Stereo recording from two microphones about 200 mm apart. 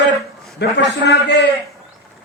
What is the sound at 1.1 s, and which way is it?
Speech, 60° left (ahead or behind).